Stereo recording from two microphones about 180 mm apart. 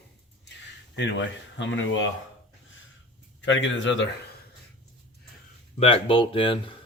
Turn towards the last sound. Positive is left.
turn(degrees=30)  # may be behind; listen again after turning